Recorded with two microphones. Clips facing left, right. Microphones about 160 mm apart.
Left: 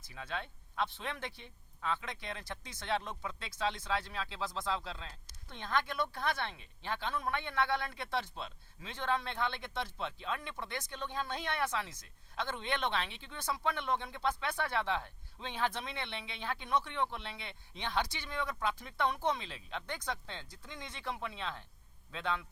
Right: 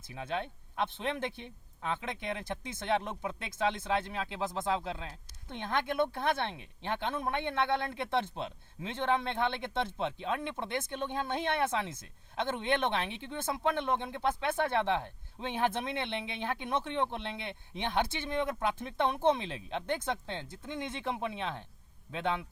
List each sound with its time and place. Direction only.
0.1 s speech: 20° right (ahead or behind)